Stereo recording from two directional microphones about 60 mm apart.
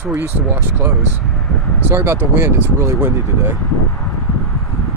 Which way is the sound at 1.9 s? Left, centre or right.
Right.